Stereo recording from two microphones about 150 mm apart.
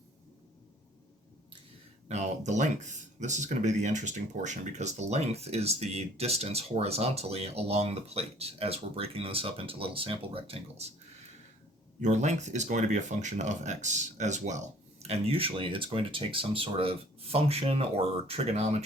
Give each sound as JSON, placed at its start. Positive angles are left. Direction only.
{"t": 2.0, "sound": "speech", "side_deg": -50}
{"t": 11.9, "sound": "speech", "side_deg": -55}
{"t": 15.0, "sound": "speech", "side_deg": -40}